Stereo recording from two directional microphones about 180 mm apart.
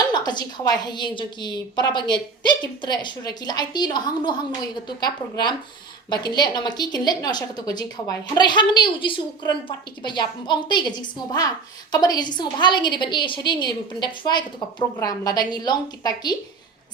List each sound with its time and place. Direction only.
0.1 s a woman's voice: 25° left (ahead or behind)